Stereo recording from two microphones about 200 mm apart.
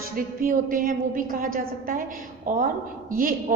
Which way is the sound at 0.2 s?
45° right (ahead or behind).